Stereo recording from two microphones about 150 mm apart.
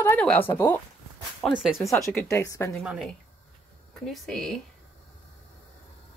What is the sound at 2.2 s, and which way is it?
Speech, 20° left (ahead or behind).